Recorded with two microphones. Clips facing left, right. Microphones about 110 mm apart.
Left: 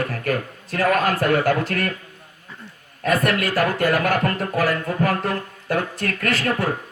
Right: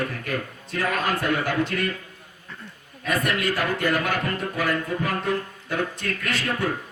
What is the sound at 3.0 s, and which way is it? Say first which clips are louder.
Speech: left 4 dB; 55° left (ahead or behind).